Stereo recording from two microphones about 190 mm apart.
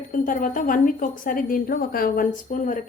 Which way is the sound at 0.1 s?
45° left (ahead or behind).